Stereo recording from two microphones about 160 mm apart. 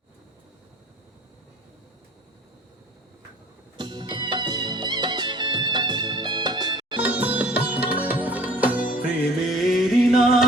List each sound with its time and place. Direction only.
3.8 s music: 25° right (ahead or behind)
7.0 s sitar: 10° right (ahead or behind)
8.0 s music: 10° right (ahead or behind)